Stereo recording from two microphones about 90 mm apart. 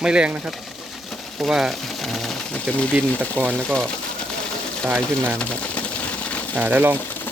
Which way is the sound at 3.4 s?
20° right (ahead or behind).